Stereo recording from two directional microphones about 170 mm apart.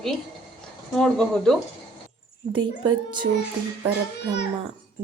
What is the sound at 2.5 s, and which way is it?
Speech, 25° right (ahead or behind).